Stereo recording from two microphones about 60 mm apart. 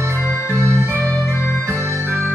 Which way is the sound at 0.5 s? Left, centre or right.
Right.